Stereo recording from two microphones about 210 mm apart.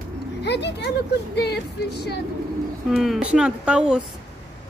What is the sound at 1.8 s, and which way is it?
Speech, 50° left (ahead or behind).